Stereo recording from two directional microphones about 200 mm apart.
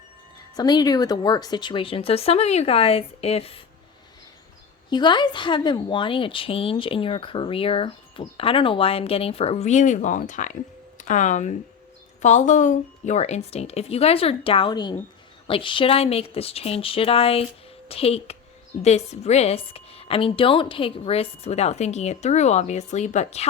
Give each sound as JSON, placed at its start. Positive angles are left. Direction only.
{"t": 0.5, "sound": "a woman's voice", "side_deg": 20}
{"t": 4.9, "sound": "a woman's voice", "side_deg": 20}